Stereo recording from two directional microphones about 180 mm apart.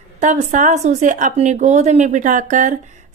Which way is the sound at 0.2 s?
45° right (ahead or behind).